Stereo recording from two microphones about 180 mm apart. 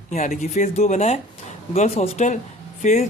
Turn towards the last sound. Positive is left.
turn(degrees=40)  # may be behind; listen again after turning